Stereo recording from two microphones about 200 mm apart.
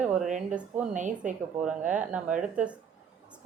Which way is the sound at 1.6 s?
5° right (ahead or behind).